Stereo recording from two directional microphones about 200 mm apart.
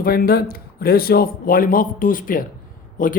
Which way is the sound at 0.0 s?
50° left (ahead or behind).